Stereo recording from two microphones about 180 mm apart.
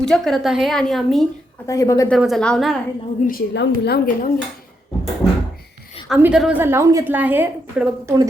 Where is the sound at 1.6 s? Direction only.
20° left (ahead or behind).